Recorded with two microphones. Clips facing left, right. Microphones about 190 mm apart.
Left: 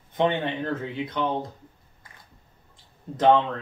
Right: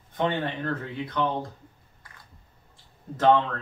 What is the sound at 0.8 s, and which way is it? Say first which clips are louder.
Speech: even; 20° left (ahead or behind).